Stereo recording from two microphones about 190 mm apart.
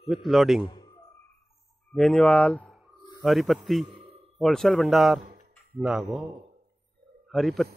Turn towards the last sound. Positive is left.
turn(degrees=0)  # may be behind; listen again after turning